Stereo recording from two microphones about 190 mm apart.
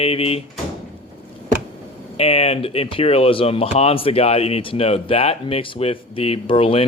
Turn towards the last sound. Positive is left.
turn(degrees=30)  # may be behind; listen again after turning